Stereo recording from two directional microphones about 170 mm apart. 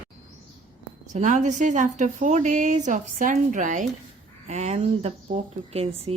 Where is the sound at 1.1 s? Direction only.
45° right (ahead or behind).